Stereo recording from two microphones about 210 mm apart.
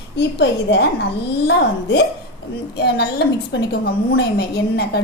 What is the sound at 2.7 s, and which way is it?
A woman's voice, 50° left (ahead or behind).